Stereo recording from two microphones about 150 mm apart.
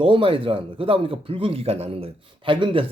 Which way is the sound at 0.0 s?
35° right (ahead or behind).